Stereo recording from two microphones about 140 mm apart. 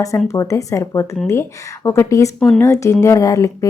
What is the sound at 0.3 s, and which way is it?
Speech, 20° left (ahead or behind).